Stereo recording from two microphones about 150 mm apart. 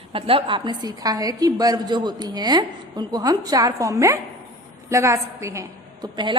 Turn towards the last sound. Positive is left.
turn(degrees=-30)  # may be behind; listen again after turning